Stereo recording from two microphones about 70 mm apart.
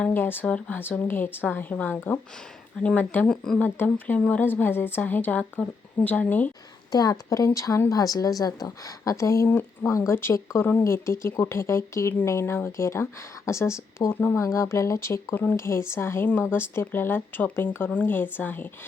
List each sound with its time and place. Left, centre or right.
0.1 s speech: left
3.2 s speech: centre
3.9 s speech: left
6.9 s a woman's voice: left